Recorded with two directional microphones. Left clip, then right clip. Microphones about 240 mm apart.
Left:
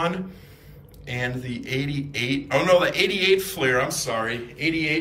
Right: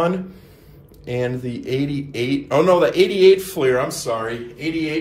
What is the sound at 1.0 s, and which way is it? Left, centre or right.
Speech, centre.